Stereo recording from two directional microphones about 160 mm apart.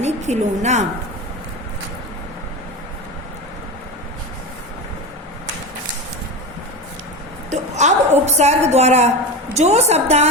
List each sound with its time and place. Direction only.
0.0 s a woman's voice: 45° right (ahead or behind)
7.5 s a woman's voice: 45° right (ahead or behind)